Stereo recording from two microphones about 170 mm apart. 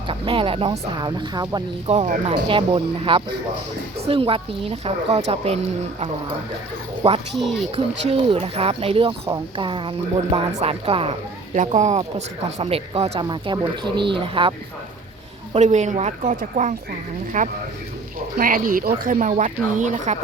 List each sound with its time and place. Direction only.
0.1 s speech: 30° right (ahead or behind)
1.9 s speech: 40° right (ahead or behind)
7.3 s speech: centre (ahead or behind)
8.0 s speech: 40° right (ahead or behind)
11.5 s speech: 45° right (ahead or behind); by 14.5 s 30° right (ahead or behind)
15.5 s speech: 45° right (ahead or behind)